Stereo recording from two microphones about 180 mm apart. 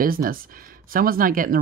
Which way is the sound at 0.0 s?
55° right (ahead or behind).